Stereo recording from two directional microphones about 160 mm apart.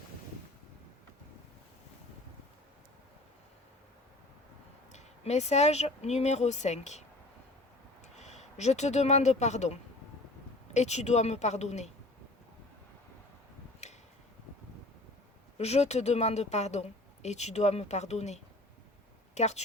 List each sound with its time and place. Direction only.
4.9 s speech: 45° left (ahead or behind)
8.0 s speech: 45° left (ahead or behind)
10.8 s speech: 45° left (ahead or behind)
13.8 s tick-tock: 45° left (ahead or behind)
15.5 s speech: 40° left (ahead or behind)